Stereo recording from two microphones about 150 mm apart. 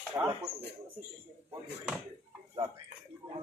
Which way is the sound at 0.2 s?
15° right (ahead or behind).